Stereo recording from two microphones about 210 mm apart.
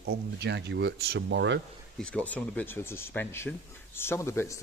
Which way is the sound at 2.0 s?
5° left (ahead or behind).